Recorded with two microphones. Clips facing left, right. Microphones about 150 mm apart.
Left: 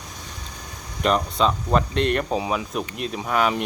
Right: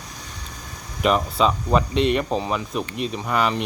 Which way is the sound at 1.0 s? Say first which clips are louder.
Right 1 dB; 5° right (ahead or behind).